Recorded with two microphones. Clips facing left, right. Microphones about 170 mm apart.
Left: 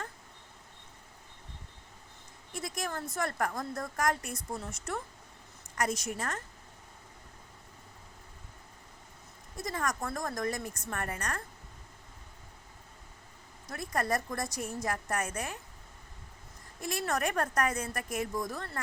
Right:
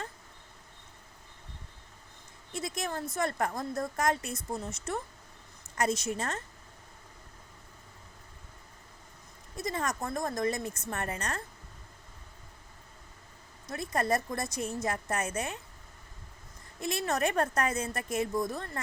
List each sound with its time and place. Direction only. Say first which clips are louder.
2.5 s a woman's voice: right 2 dB; 25° right (ahead or behind)
9.6 s a woman's voice: right 1 dB; 20° right (ahead or behind)
13.7 s a woman's voice: right 2 dB; 25° right (ahead or behind)
16.8 s a woman's voice: right 2 dB; 20° right (ahead or behind)